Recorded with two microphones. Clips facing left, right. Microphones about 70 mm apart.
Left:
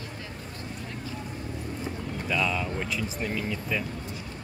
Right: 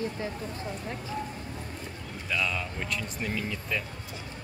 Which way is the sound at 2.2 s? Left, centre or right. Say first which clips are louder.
Left 3 dB; centre.